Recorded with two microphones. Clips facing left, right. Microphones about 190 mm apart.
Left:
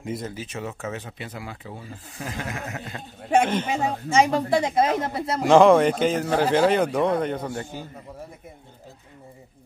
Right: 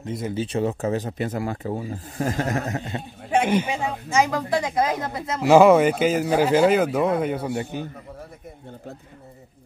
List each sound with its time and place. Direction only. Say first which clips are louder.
0.3 s speech: right 9 dB; 30° right (ahead or behind)
3.4 s speech: right 4 dB; 10° right (ahead or behind)
3.7 s a woman's voice: left 2 dB; 40° left (ahead or behind)
4.2 s speech: left 2 dB; 25° left (ahead or behind)
5.4 s speech: right 1 dB; 5° right (ahead or behind)